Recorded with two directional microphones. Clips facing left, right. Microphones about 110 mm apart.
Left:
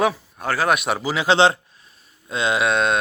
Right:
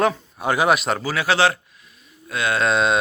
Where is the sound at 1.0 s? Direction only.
15° left (ahead or behind).